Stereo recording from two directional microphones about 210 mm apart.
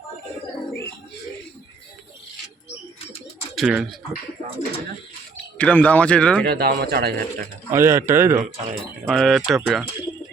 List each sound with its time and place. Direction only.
3.5 s speech: centre (ahead or behind)
5.5 s speech: 5° left (ahead or behind)
6.4 s speech: 50° right (ahead or behind)
7.7 s speech: 15° right (ahead or behind)
9.0 s speech: centre (ahead or behind)